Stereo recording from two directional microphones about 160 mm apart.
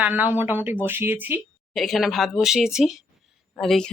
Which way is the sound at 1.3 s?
Centre (ahead or behind).